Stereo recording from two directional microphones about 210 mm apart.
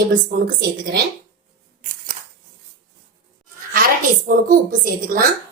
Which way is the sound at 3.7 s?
40° right (ahead or behind).